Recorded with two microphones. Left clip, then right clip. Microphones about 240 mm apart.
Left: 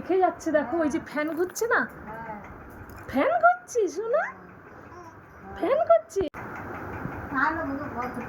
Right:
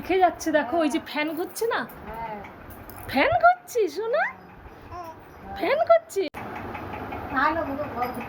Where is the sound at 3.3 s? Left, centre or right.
Centre.